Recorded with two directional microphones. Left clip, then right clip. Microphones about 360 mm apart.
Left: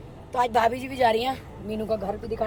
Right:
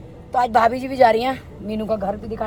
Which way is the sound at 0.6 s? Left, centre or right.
Centre.